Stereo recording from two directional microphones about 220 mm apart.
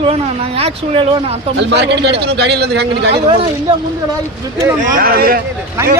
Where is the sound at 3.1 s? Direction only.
25° right (ahead or behind).